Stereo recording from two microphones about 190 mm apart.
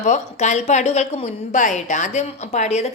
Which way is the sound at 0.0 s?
40° left (ahead or behind).